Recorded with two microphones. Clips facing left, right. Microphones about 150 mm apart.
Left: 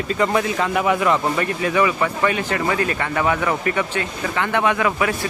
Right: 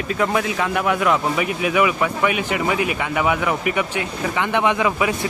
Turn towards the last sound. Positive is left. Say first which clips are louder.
# even
turn(degrees=-15)  # may be behind; listen again after turning